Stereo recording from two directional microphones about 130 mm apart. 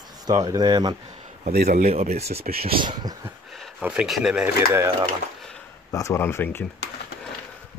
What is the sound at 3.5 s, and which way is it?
Speech, 5° right (ahead or behind).